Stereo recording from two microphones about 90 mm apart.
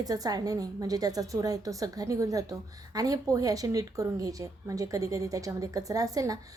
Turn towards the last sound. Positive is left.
turn(degrees=-40)  # may be behind; listen again after turning